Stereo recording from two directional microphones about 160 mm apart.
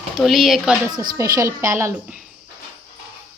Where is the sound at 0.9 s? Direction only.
25° right (ahead or behind).